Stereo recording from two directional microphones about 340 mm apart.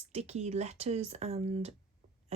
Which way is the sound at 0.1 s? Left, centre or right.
Centre.